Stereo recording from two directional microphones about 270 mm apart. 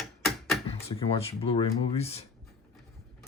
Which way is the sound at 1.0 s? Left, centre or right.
Left.